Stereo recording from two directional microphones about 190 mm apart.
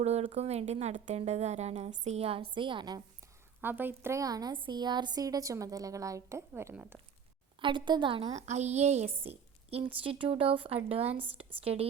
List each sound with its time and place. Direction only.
0.0 s speech: 35° right (ahead or behind)
3.6 s a woman's voice: 10° right (ahead or behind)
7.6 s a woman's voice: 25° right (ahead or behind)